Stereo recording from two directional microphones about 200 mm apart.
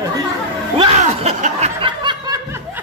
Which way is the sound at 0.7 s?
30° right (ahead or behind).